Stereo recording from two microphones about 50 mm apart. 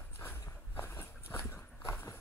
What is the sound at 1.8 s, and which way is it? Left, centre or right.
Horse, left.